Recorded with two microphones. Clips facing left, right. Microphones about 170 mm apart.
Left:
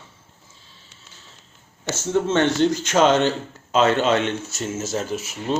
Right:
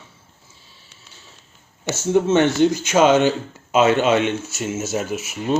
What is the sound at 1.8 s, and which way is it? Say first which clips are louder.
Speech: right 4 dB; 10° right (ahead or behind).